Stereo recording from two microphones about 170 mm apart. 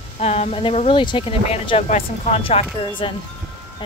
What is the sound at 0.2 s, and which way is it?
Speech, 40° left (ahead or behind).